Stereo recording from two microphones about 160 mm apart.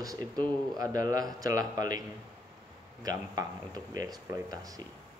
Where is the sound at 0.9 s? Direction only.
25° right (ahead or behind).